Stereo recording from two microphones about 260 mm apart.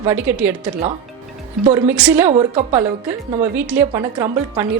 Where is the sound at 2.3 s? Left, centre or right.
Right.